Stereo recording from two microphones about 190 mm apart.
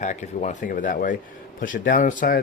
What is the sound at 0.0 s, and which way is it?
Speech, 40° left (ahead or behind).